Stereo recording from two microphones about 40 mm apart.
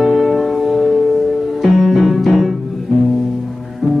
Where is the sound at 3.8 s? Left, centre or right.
Centre.